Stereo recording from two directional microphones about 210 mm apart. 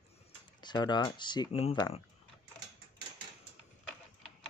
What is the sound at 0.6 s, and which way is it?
Speech, 20° left (ahead or behind).